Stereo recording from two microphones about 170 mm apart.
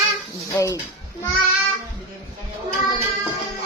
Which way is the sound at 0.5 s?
20° left (ahead or behind).